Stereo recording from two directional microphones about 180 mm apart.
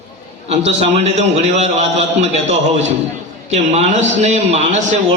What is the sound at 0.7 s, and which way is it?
A man's voice, 35° right (ahead or behind).